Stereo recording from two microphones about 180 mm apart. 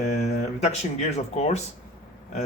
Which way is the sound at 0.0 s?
40° left (ahead or behind).